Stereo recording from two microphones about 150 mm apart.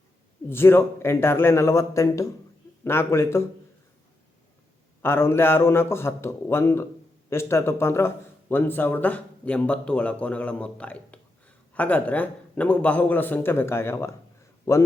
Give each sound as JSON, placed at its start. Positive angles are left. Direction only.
{"t": 0.4, "sound": "speech", "side_deg": 15}
{"t": 5.0, "sound": "a man's voice", "side_deg": 15}